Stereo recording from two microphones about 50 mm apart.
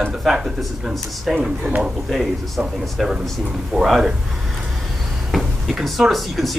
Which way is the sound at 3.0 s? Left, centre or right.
Centre.